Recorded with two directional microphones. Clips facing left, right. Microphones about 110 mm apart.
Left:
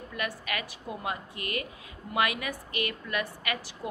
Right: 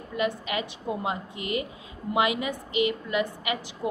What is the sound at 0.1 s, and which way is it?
A woman's voice, 20° right (ahead or behind).